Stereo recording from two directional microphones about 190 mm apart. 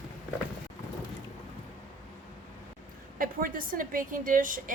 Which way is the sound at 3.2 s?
50° right (ahead or behind).